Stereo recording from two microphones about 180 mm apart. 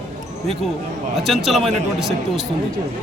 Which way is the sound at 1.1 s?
Centre (ahead or behind).